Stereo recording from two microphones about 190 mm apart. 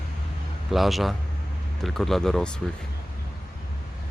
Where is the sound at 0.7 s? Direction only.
Centre (ahead or behind).